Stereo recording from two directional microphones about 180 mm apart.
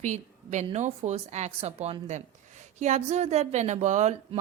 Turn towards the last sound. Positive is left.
turn(degrees=-40)  # may be behind; listen again after turning